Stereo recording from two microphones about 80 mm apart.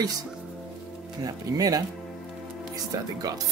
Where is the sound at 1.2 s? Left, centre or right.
Right.